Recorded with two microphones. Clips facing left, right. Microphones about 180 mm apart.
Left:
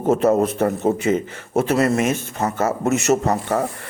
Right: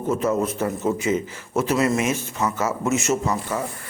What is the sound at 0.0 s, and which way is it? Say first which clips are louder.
A man's voice: left 5 dB; 70° left (ahead or behind).